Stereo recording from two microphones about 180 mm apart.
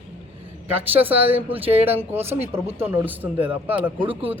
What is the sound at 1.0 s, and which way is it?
A man's voice, 10° right (ahead or behind).